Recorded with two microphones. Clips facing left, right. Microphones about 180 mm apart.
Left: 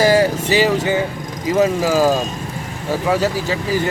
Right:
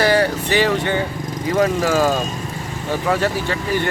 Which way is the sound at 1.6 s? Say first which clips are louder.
Left 2 dB; 10° left (ahead or behind).